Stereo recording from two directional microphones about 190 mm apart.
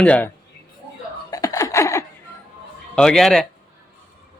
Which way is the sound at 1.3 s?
20° left (ahead or behind).